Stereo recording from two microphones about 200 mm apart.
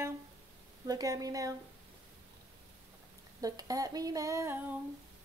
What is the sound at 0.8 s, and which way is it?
Female singing, 20° right (ahead or behind).